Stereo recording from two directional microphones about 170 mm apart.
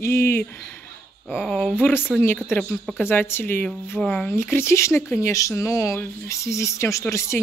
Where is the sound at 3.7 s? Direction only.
Centre (ahead or behind).